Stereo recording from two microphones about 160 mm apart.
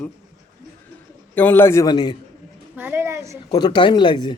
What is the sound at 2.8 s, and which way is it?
Speech, 10° right (ahead or behind).